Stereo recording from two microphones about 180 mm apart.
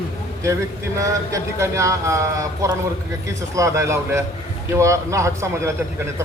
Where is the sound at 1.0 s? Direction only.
15° right (ahead or behind).